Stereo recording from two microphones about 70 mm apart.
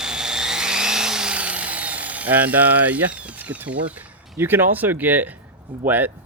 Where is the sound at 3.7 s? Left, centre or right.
Centre.